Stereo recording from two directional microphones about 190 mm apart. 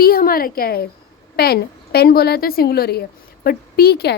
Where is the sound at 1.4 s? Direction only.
55° left (ahead or behind).